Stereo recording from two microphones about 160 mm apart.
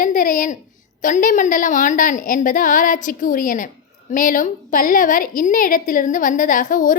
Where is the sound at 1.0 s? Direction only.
55° left (ahead or behind).